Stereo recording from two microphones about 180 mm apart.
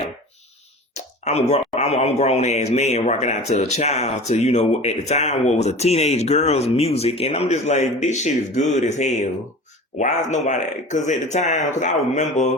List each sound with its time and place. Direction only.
0.9 s speech: 40° left (ahead or behind)